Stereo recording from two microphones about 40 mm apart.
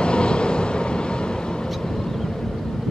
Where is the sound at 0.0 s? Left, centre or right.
Left.